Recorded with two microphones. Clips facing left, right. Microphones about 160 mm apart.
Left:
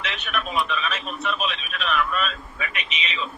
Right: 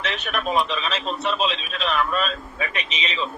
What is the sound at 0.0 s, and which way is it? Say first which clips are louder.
A man's voice: right 3 dB; 40° right (ahead or behind).